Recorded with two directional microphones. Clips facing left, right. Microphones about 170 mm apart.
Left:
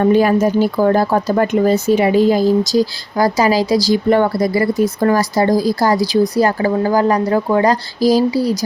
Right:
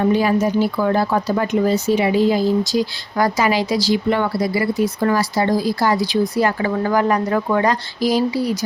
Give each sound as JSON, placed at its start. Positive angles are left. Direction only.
{"t": 0.0, "sound": "speech", "side_deg": 50}